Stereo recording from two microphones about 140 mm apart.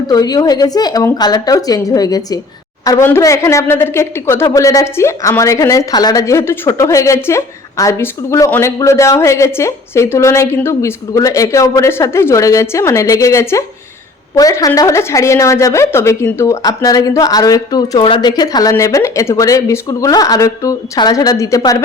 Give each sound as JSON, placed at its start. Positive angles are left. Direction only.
{"t": 0.1, "sound": "speech", "side_deg": 30}